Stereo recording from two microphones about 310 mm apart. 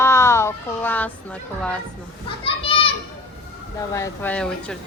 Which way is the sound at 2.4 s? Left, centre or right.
Centre.